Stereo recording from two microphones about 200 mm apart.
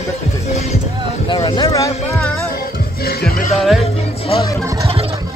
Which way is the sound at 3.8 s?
30° left (ahead or behind).